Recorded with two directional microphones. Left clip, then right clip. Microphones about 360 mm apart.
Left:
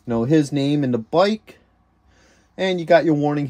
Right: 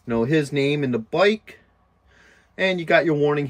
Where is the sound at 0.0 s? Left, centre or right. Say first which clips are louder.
Left 2 dB; centre.